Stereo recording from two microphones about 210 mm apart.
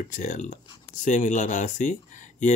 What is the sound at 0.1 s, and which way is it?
Speech, 40° left (ahead or behind).